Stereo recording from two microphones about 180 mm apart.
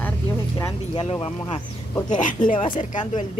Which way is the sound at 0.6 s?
20° left (ahead or behind).